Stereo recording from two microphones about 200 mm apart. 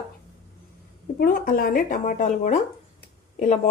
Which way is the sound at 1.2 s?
45° left (ahead or behind).